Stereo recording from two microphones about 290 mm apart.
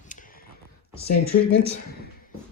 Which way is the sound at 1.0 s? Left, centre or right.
Left.